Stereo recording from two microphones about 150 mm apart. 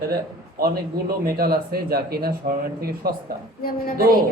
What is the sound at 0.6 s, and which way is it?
Speech, 90° right.